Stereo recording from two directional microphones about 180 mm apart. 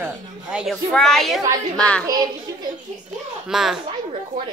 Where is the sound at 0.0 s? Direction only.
5° right (ahead or behind).